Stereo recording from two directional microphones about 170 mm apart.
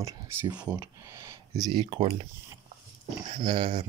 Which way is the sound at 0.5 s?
10° right (ahead or behind).